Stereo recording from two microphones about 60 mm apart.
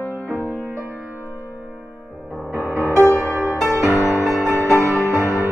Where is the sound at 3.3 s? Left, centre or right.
Right.